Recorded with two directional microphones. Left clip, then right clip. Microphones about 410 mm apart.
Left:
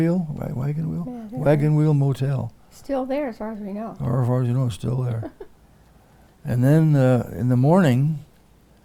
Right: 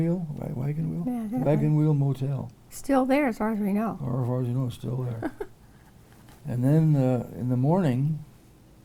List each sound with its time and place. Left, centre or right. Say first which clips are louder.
0.0 s speech: left 6 dB; left
1.5 s speech: left 6 dB; left
2.7 s a woman's voice: right 2 dB; right
4.0 s speech: left 6 dB; left
6.4 s speech: left 5 dB; left